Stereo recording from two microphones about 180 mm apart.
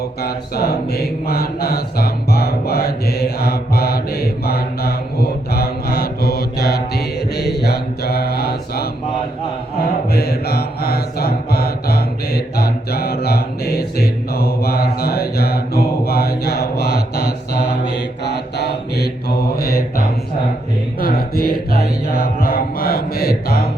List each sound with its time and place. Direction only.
0.2 s mantra: 60° left (ahead or behind)
10.1 s mantra: 60° left (ahead or behind)